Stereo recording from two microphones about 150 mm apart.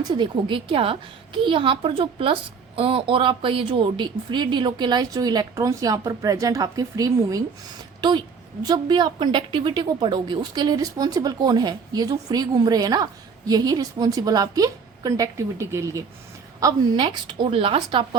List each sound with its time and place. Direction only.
0.1 s a woman's voice: 30° right (ahead or behind)